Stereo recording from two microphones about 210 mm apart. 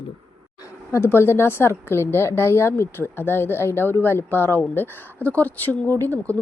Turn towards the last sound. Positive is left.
turn(degrees=10)  # may be behind; listen again after turning